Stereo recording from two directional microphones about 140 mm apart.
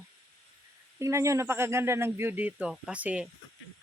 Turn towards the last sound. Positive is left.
turn(degrees=-10)  # may be behind; listen again after turning